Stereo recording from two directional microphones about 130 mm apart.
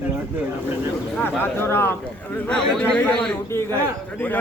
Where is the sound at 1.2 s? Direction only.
15° left (ahead or behind).